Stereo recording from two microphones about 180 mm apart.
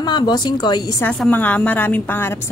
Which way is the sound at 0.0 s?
25° left (ahead or behind).